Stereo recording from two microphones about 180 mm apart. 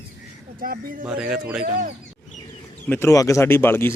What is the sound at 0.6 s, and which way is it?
Speech, 50° right (ahead or behind).